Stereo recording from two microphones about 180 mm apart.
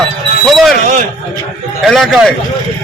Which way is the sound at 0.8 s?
40° right (ahead or behind).